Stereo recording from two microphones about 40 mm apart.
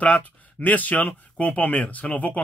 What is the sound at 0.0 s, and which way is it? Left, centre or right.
Speech, left.